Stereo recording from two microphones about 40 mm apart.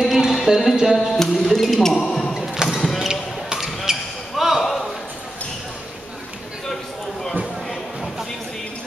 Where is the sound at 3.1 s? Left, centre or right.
Centre.